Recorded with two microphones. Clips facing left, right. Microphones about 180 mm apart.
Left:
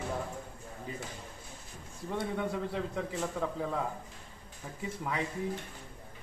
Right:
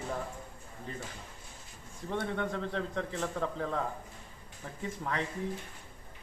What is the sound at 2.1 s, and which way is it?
Speech, 10° left (ahead or behind).